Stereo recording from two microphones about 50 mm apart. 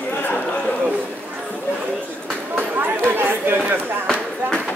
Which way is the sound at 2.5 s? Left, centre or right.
Right.